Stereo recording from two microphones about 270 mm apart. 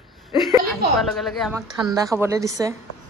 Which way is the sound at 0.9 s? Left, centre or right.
Centre.